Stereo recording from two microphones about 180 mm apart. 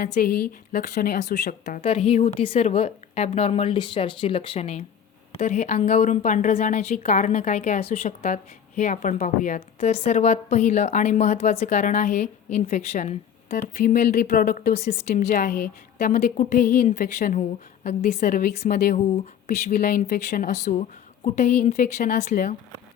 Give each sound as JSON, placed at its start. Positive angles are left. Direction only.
{"t": 0.0, "sound": "a woman's voice", "side_deg": 60}
{"t": 1.8, "sound": "a woman's voice", "side_deg": 35}
{"t": 13.7, "sound": "speech", "side_deg": 50}
{"t": 14.7, "sound": "a woman's voice", "side_deg": 35}
{"t": 16.2, "sound": "speech", "side_deg": 50}
{"t": 17.8, "sound": "a woman's voice", "side_deg": 40}